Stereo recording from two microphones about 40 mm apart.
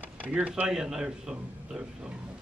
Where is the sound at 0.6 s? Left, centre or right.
Centre.